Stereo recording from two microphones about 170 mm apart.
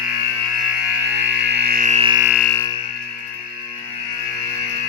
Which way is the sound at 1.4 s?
85° right.